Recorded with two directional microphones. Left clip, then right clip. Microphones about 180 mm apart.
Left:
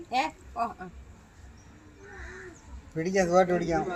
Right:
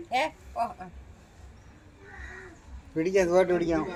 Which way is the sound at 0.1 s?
60° right (ahead or behind).